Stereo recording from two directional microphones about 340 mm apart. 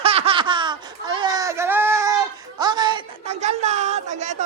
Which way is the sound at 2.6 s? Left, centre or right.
Centre.